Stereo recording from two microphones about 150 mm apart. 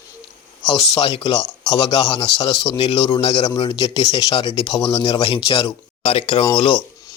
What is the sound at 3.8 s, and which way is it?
Speech, 25° left (ahead or behind).